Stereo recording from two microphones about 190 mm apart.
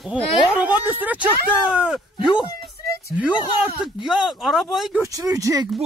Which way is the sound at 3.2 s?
5° right (ahead or behind).